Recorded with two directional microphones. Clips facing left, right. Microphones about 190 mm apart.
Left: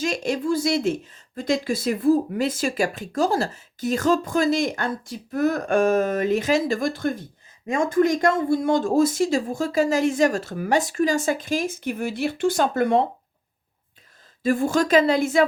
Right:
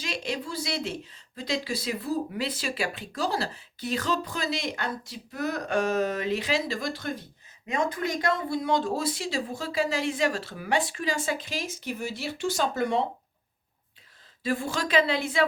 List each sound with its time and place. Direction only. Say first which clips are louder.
0.0 s speech: left 8 dB; 45° left (ahead or behind)
14.4 s speech: left 8 dB; 45° left (ahead or behind)